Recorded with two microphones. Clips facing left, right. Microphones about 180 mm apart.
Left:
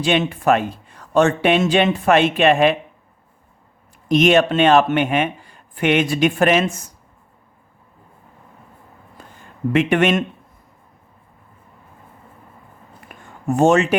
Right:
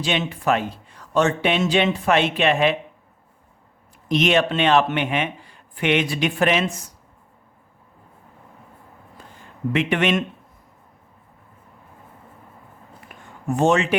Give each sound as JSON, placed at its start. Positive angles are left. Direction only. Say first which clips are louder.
{"t": 0.0, "sound": "speech", "louder": "left 5 dB", "side_deg": 50}
{"t": 4.1, "sound": "speech", "louder": "left 5 dB", "side_deg": 45}
{"t": 9.7, "sound": "speech", "louder": "left 4 dB", "side_deg": 45}
{"t": 13.1, "sound": "a sound", "louder": "left 4 dB", "side_deg": 50}
{"t": 13.5, "sound": "speech", "louder": "left 4 dB", "side_deg": 45}